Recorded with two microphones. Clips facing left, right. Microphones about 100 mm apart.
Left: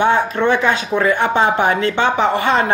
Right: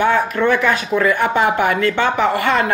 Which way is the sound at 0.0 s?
20° left (ahead or behind).